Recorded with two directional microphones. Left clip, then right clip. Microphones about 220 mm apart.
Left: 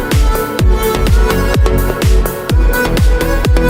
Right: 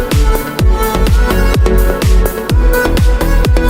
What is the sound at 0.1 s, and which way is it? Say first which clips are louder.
Music: left 1 dB; centre (ahead or behind).